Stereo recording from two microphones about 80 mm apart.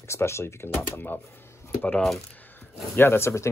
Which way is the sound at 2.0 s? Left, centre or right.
Centre.